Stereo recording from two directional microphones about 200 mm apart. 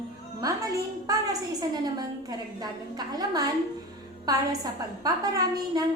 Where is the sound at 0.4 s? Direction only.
20° right (ahead or behind).